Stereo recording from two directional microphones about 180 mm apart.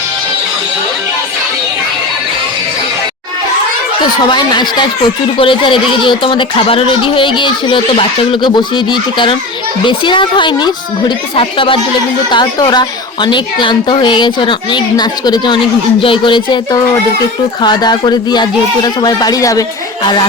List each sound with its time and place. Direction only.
4.3 s speech: 25° left (ahead or behind)